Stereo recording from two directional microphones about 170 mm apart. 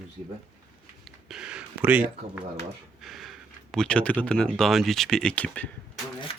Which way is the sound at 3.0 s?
Centre (ahead or behind).